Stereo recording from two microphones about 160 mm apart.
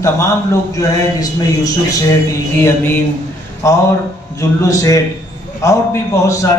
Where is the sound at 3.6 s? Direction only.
20° left (ahead or behind).